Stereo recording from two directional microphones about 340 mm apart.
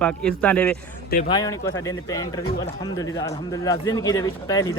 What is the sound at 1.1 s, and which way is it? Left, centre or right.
Speech, left.